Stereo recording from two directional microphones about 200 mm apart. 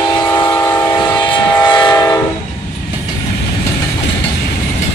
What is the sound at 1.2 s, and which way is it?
Train, 25° left (ahead or behind).